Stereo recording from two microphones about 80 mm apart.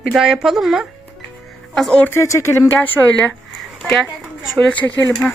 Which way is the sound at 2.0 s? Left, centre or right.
Left.